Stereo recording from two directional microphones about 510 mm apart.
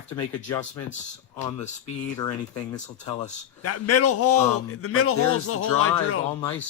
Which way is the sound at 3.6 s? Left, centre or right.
Left.